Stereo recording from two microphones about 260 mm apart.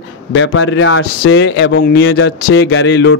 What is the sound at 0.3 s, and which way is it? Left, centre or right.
A man's voice, left.